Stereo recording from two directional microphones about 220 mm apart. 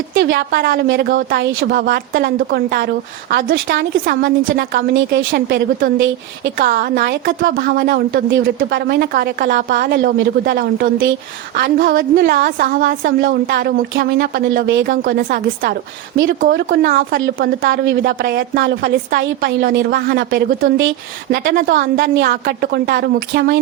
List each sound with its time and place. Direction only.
0.1 s a woman's voice: 55° right (ahead or behind)